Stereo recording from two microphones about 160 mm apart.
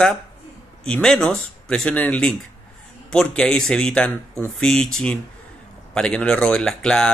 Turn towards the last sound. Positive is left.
turn(degrees=5)  # may be behind; listen again after turning